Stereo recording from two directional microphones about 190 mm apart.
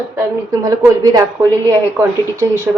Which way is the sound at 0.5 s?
15° right (ahead or behind).